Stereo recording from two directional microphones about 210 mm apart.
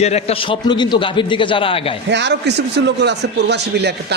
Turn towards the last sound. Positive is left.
turn(degrees=-50)  # may be behind; listen again after turning